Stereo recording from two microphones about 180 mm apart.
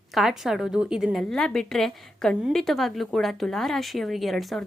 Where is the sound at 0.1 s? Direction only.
Centre (ahead or behind).